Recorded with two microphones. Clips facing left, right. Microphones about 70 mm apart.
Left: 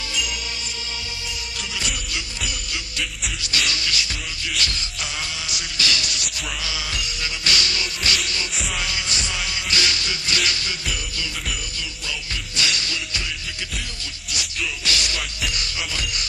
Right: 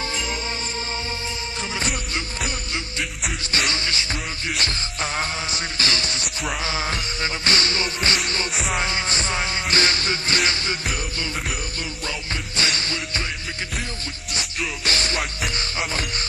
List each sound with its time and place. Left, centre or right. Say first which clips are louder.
3.5 s music: even; right
12.5 s music: right 1 dB; right
14.3 s music: even; right